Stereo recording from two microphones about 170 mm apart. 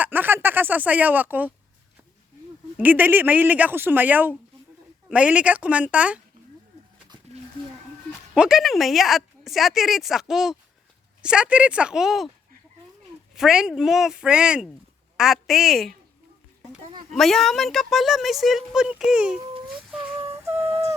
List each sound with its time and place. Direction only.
0.0 s a sound: 10° right (ahead or behind)
2.7 s speech: 10° right (ahead or behind)
8.4 s a woman's voice: centre (ahead or behind)
13.3 s a woman's voice: 5° right (ahead or behind)
17.1 s a woman's voice: centre (ahead or behind)
20.4 s music: 15° right (ahead or behind)
20.7 s a sound: 35° right (ahead or behind)